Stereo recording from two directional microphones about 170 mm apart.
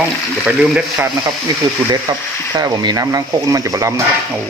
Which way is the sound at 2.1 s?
25° right (ahead or behind).